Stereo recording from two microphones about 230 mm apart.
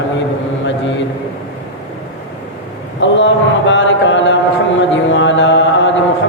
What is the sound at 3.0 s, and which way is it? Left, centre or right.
Mantra, left.